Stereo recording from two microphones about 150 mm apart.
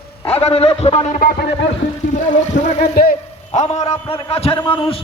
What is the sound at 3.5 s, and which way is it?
A man's voice, 45° left (ahead or behind).